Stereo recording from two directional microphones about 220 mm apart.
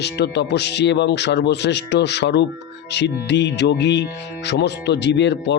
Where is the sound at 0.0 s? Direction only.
50° left (ahead or behind).